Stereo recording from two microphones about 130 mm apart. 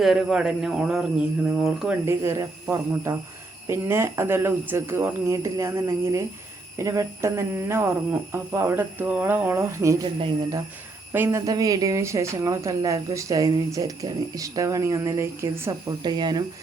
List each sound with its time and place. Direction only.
0.0 s a man's voice: 5° right (ahead or behind)
2.0 s speech: 25° right (ahead or behind)
11.1 s speech: 20° right (ahead or behind)
16.0 s speech: 35° right (ahead or behind)